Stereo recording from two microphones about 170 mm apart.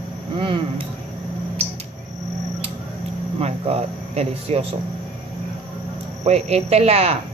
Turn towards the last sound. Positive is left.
turn(degrees=-40)  # may be behind; listen again after turning